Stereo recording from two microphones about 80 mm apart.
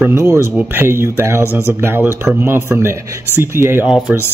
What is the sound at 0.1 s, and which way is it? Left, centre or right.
A man's voice, right.